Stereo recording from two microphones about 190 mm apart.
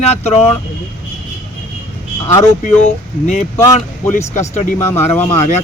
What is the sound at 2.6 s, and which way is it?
Speech, 35° left (ahead or behind).